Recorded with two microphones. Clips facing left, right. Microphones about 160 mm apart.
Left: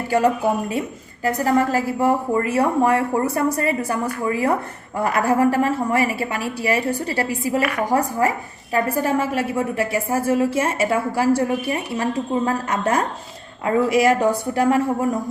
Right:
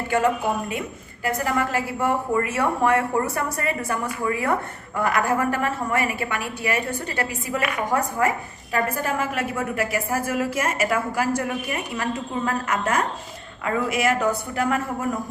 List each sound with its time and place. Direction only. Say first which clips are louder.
1.2 s a woman's voice: left 5 dB; 40° left (ahead or behind)